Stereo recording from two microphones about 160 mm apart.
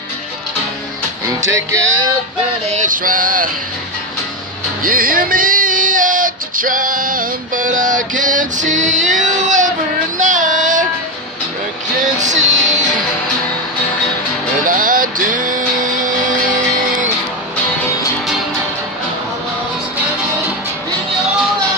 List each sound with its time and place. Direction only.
1.5 s music: 20° right (ahead or behind)
2.6 s male singing: 50° right (ahead or behind)
4.8 s music: 60° right (ahead or behind)
10.1 s child singing: 50° right (ahead or behind)
12.0 s music: 50° right (ahead or behind)
14.7 s music: 60° right (ahead or behind)